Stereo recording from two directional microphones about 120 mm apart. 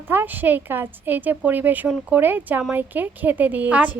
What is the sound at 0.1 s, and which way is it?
Speech, 15° right (ahead or behind).